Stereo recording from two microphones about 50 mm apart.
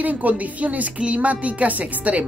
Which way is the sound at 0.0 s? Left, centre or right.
Right.